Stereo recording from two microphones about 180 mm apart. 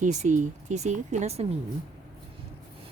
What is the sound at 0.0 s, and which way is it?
Speech, 40° right (ahead or behind).